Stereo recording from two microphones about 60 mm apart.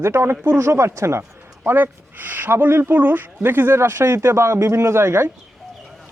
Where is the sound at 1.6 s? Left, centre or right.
Right.